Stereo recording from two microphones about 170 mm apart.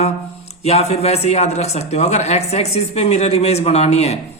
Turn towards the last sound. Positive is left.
turn(degrees=40)  # may be behind; listen again after turning